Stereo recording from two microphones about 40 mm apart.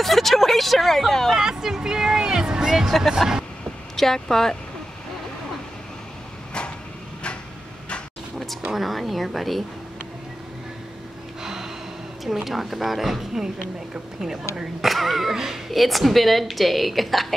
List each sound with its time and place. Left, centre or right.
0.0 s speech: centre
1.3 s speech: centre
3.9 s speech: centre
8.7 s a woman's voice: centre
11.4 s a sound: centre
12.4 s a woman's voice: centre
14.8 s a woman's voice: centre